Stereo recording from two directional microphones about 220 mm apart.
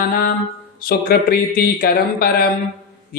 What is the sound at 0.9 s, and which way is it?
Mantra, 45° left (ahead or behind).